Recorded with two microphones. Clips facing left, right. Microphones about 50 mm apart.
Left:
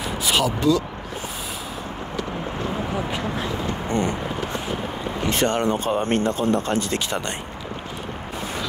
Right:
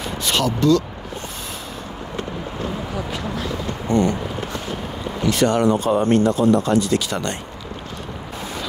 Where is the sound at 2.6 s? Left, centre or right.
Left.